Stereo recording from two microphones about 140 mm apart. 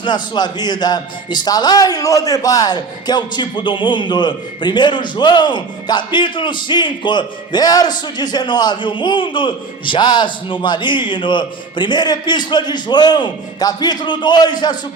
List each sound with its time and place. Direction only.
0.0 s a man's voice: 30° left (ahead or behind)